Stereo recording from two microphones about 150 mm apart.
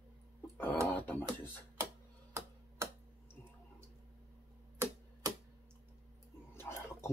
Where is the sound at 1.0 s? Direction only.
15° left (ahead or behind).